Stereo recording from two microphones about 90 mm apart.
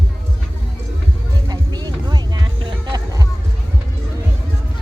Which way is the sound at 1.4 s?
50° right (ahead or behind).